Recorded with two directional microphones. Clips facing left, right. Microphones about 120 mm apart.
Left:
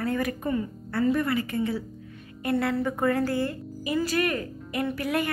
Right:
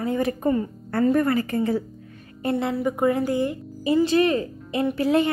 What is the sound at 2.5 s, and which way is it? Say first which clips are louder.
A woman's voice: right 1 dB; 15° right (ahead or behind).